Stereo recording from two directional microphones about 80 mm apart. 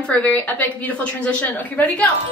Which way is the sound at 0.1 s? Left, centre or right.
Centre.